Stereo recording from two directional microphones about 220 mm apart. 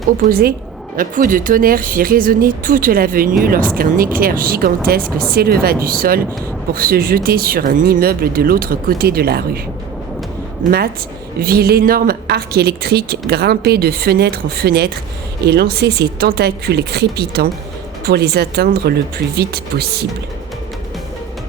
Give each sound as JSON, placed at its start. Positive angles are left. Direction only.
{"t": 0.2, "sound": "a woman's voice", "side_deg": -40}
{"t": 10.6, "sound": "a woman's voice", "side_deg": -45}